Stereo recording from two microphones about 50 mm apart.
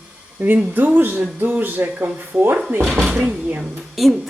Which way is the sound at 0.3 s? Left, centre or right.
Right.